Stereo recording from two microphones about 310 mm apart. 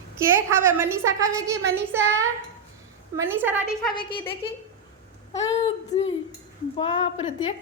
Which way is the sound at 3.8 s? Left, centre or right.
Centre.